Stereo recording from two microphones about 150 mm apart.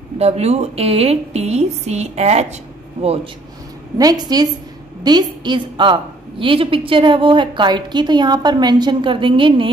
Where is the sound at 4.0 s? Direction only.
25° right (ahead or behind).